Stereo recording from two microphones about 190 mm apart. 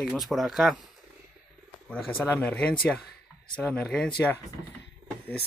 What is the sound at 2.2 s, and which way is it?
Speech, 10° left (ahead or behind).